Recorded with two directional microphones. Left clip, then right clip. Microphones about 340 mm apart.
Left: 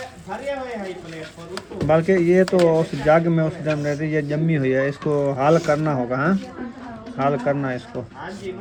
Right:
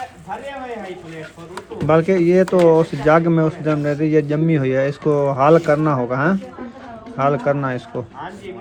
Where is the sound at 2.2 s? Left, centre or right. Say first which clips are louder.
Right 2 dB; centre.